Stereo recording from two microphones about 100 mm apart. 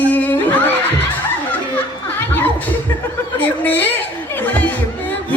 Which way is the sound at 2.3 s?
20° left (ahead or behind).